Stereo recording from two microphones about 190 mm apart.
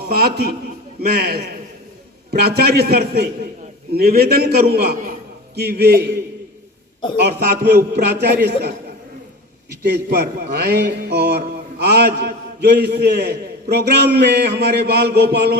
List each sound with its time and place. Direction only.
0.1 s a man's voice: 55° right (ahead or behind)
2.6 s a man's voice: 55° right (ahead or behind)
7.3 s a man's voice: 55° right (ahead or behind)
9.8 s a man's voice: 60° right (ahead or behind)